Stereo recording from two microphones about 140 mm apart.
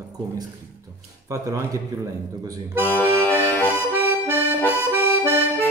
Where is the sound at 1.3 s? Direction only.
25° right (ahead or behind).